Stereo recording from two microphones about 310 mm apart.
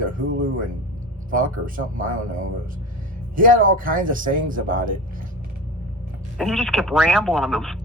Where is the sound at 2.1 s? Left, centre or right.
Right.